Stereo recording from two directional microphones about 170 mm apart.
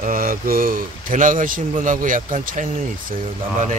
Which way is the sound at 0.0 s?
55° right (ahead or behind).